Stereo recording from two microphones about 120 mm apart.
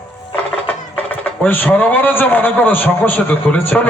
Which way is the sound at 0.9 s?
15° left (ahead or behind).